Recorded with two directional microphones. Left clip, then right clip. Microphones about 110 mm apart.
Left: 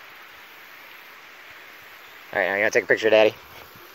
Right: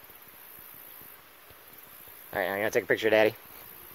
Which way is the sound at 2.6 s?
25° right (ahead or behind).